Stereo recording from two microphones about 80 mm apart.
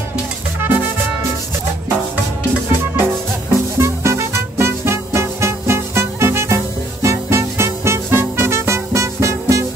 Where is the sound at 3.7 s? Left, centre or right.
Right.